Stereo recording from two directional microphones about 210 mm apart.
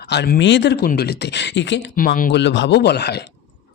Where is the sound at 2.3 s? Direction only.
55° left (ahead or behind).